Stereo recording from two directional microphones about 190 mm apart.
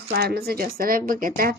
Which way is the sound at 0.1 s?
55° right (ahead or behind).